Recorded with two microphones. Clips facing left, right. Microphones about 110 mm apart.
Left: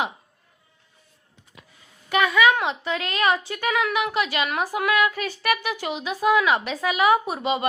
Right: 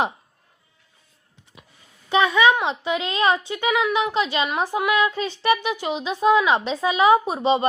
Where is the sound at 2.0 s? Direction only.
25° right (ahead or behind).